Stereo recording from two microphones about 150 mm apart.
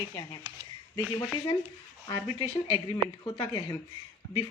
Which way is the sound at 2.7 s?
30° left (ahead or behind).